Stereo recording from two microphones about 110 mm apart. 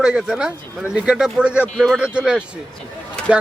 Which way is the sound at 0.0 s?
5° right (ahead or behind).